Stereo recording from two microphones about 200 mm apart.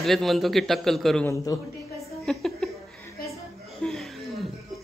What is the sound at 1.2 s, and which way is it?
Speech, 15° left (ahead or behind).